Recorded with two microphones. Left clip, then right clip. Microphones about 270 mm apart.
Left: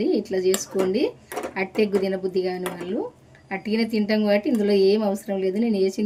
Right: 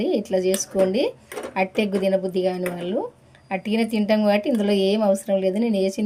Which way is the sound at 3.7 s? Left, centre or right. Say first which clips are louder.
Right 2 dB; right.